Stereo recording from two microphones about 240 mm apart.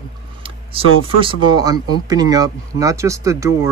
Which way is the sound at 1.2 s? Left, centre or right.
Centre.